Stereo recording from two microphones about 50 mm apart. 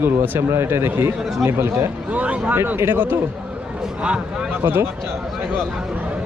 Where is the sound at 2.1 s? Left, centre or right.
Right.